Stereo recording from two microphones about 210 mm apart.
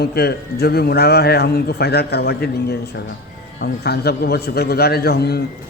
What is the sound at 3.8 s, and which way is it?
A man's voice, 50° left (ahead or behind).